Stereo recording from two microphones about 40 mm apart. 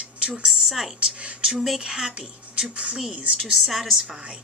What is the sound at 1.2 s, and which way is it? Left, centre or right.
Speech, right.